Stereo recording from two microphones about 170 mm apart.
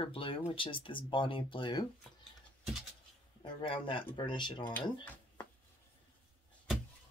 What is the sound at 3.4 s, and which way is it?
Speech, 30° left (ahead or behind).